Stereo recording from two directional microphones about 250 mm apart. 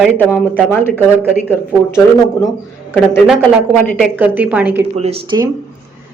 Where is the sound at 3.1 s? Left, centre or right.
Centre.